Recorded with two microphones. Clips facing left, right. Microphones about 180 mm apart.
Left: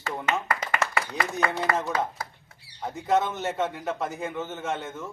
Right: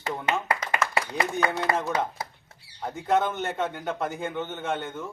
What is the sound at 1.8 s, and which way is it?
A man's voice, centre (ahead or behind).